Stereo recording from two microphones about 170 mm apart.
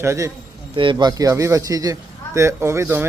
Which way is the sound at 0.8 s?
25° right (ahead or behind).